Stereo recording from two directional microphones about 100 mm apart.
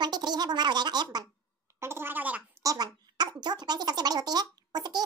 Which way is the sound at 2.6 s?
40° right (ahead or behind).